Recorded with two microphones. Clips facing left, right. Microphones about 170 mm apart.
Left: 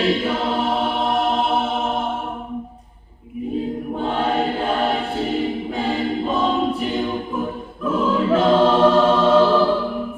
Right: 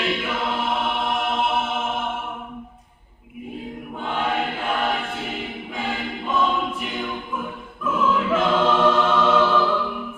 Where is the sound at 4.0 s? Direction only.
35° left (ahead or behind).